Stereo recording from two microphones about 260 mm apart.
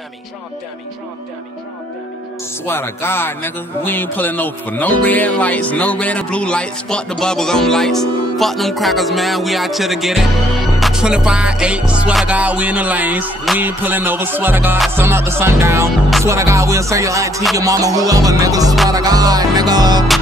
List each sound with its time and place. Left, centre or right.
2.6 s speech: centre
16.3 s music: centre